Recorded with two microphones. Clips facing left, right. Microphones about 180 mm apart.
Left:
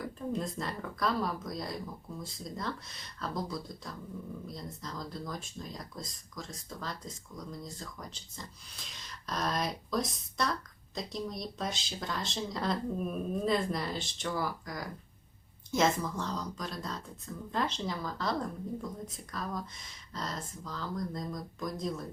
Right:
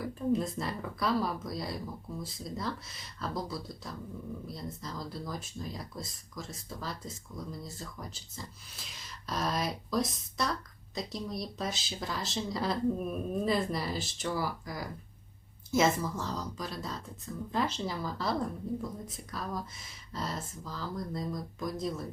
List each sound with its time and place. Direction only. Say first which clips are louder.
0.0 s speech: right 5 dB; 5° right (ahead or behind)